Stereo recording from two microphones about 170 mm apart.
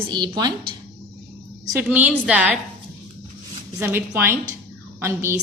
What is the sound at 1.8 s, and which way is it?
Speech, 10° right (ahead or behind).